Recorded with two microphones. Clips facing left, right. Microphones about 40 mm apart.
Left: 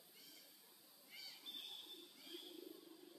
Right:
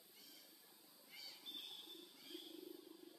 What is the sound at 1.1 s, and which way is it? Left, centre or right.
Wild animals, centre.